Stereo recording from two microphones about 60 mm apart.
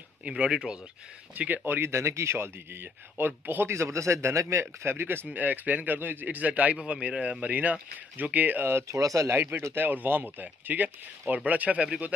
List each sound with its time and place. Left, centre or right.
0.3 s speech: centre
1.3 s speech: right
1.8 s a man's voice: right
3.7 s a man's voice: right
8.8 s speech: right
9.3 s speech: right; by 12.1 s centre